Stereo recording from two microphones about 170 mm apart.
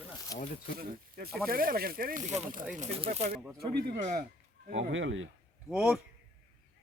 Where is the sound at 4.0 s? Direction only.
50° right (ahead or behind).